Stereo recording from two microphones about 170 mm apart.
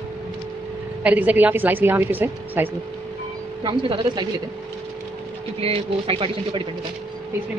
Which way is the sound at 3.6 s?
30° right (ahead or behind).